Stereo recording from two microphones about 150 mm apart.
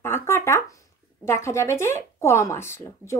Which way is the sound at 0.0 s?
15° left (ahead or behind).